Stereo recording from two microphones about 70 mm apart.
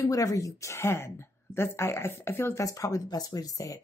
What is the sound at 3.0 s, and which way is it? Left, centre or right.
Speech, left.